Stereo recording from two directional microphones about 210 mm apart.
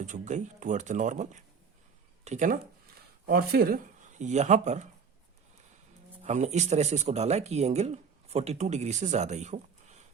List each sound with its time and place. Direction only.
0.0 s speech: 35° right (ahead or behind)
3.2 s speech: 45° right (ahead or behind)
6.2 s speech: 35° right (ahead or behind)